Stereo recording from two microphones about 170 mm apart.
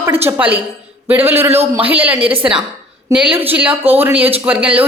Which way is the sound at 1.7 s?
10° right (ahead or behind).